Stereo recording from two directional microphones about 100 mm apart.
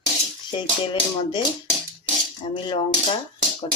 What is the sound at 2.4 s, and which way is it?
Speech, 75° left (ahead or behind).